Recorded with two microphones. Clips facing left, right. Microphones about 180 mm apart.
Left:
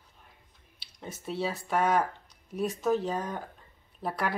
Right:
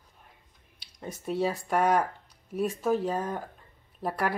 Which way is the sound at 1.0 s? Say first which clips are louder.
Right 4 dB; 10° right (ahead or behind).